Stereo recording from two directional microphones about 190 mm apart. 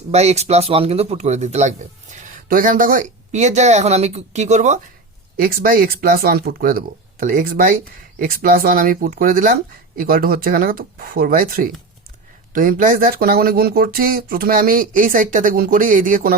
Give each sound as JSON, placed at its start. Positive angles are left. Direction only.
{"t": 0.1, "sound": "speech", "side_deg": -35}
{"t": 5.4, "sound": "speech", "side_deg": -50}